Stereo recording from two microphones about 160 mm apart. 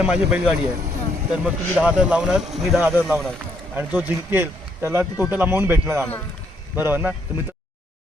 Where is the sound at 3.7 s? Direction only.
10° right (ahead or behind).